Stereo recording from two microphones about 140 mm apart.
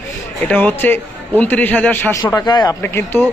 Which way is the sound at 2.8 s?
15° left (ahead or behind).